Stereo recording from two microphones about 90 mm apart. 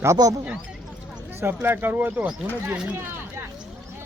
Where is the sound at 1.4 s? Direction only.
25° right (ahead or behind).